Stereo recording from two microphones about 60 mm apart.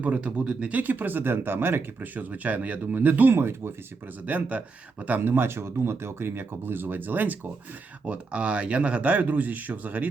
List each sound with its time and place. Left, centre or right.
0.0 s speech: right
3.3 s speech: right
4.3 s speech: right